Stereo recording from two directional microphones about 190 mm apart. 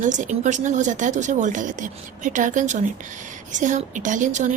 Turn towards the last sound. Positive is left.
turn(degrees=-40)  # may be behind; listen again after turning